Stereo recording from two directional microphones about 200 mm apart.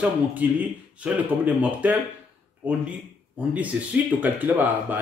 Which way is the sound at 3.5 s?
5° right (ahead or behind).